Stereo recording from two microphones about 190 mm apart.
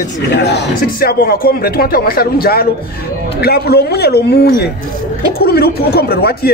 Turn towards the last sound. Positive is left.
turn(degrees=55)  # may be behind; listen again after turning